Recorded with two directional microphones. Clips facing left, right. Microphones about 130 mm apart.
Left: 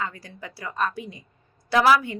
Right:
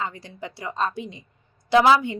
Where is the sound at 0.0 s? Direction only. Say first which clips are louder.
Right 2 dB; 25° right (ahead or behind).